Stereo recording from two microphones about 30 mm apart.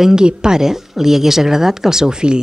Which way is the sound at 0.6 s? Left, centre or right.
Centre.